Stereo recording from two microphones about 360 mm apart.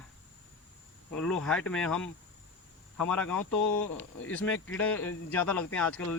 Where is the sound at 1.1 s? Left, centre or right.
Centre.